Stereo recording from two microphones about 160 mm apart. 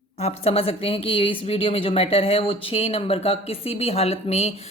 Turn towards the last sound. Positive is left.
turn(degrees=40)  # may be behind; listen again after turning